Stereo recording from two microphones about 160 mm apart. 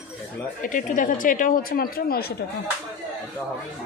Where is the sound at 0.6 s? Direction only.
55° left (ahead or behind).